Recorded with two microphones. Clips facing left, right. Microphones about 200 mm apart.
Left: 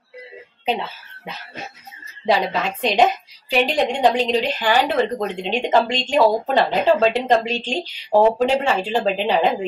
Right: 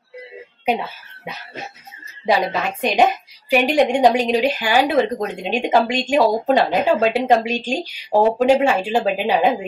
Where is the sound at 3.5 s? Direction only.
10° right (ahead or behind).